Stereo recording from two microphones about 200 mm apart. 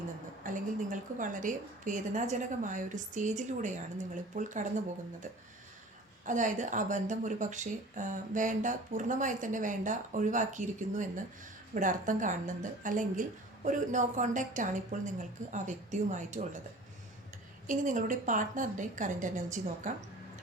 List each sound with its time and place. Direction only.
0.4 s speech: 40° right (ahead or behind)
6.2 s speech: 40° right (ahead or behind)
17.7 s speech: 40° right (ahead or behind)